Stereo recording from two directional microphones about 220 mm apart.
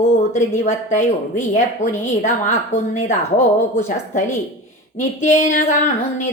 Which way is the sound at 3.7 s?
30° left (ahead or behind).